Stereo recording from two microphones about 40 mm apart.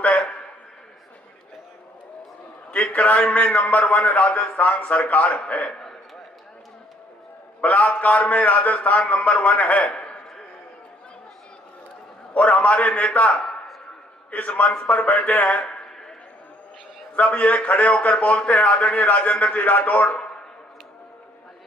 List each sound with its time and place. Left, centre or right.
0.0 s a sound: left
2.7 s a man's voice: left
5.7 s a sound: centre
7.6 s a man's voice: left
12.6 s a man's voice: left
14.7 s speech: left
17.1 s a man's voice: left